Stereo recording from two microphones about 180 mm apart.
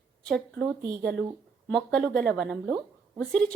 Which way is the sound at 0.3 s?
5° left (ahead or behind).